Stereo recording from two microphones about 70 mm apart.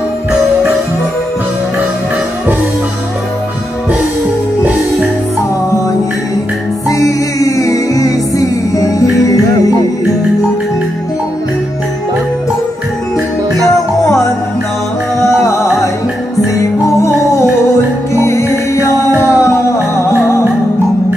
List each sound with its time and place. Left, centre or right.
6.9 s music: left
15.2 s music: left